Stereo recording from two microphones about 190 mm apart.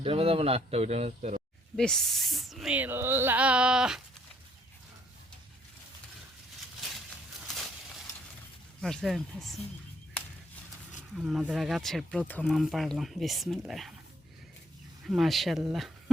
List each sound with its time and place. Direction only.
0.0 s speech: 30° right (ahead or behind)
1.7 s speech: centre (ahead or behind)
7.4 s a sound: centre (ahead or behind)
8.8 s speech: centre (ahead or behind)
11.1 s speech: centre (ahead or behind)
15.0 s speech: centre (ahead or behind)